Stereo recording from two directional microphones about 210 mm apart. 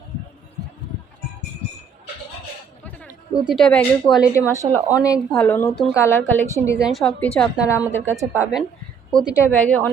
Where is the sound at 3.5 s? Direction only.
5° left (ahead or behind).